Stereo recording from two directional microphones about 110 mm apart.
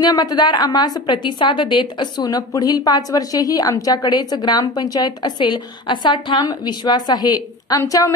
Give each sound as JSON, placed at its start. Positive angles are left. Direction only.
{"t": 0.0, "sound": "a woman's voice", "side_deg": 40}